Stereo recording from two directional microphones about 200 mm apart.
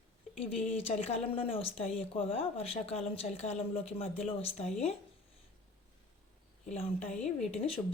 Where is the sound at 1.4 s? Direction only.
30° left (ahead or behind).